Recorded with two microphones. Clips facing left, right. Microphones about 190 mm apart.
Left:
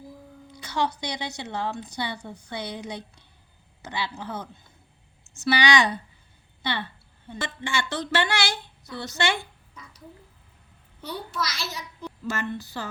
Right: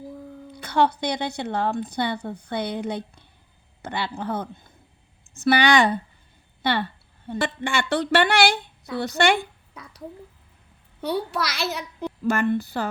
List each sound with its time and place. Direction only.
0.5 s a woman's voice: 55° right (ahead or behind)
9.8 s a sound: 65° right (ahead or behind)
11.0 s speech: 65° right (ahead or behind)